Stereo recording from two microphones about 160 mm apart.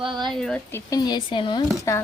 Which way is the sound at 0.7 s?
25° left (ahead or behind).